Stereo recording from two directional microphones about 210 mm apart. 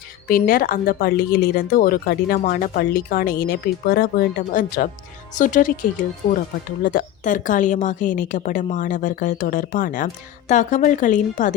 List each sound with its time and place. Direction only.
0.3 s a woman's voice: 45° left (ahead or behind)